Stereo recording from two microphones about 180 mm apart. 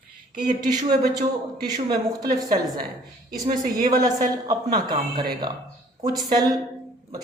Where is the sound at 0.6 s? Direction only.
20° right (ahead or behind).